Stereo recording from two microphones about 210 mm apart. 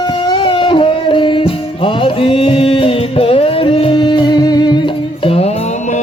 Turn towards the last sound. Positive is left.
turn(degrees=25)  # may be behind; listen again after turning